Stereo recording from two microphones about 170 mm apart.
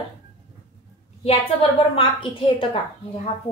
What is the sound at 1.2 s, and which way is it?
A woman's voice, 35° left (ahead or behind).